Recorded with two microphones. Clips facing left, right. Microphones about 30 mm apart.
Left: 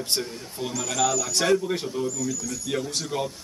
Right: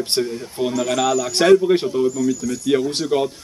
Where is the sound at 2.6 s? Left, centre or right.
Right.